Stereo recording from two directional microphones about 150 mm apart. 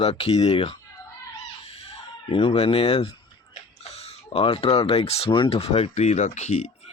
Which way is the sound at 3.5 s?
45° left (ahead or behind).